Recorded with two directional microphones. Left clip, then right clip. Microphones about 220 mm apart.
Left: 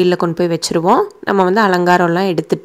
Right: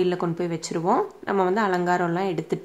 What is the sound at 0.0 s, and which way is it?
Speech, 30° left (ahead or behind).